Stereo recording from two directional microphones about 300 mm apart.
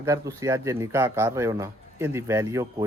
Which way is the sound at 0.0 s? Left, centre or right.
Centre.